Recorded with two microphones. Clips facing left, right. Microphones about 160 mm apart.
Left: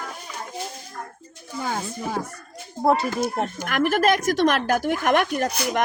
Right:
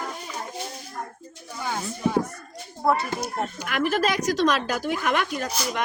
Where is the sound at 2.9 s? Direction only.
25° left (ahead or behind).